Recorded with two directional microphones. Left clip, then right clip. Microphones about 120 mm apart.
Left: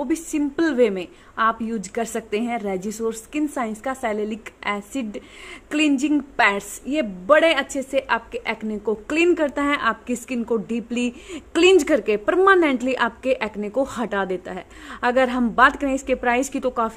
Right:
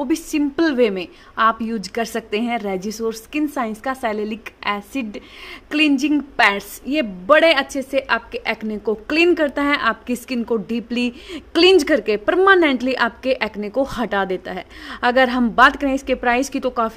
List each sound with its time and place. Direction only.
0.0 s a woman's voice: 30° right (ahead or behind)